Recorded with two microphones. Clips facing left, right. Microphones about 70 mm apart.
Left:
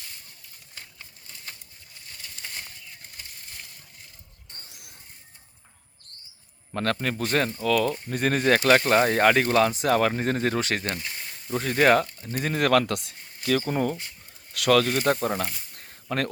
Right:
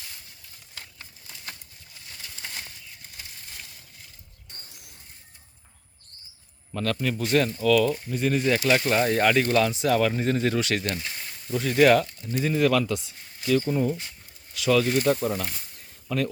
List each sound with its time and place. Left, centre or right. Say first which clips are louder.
6.7 s speech: even; left
8.1 s speech: left 5 dB; left
11.0 s a sound: even; centre
11.5 s speech: right 1 dB; left
12.4 s speech: even; left
15.8 s a sound: right 1 dB; left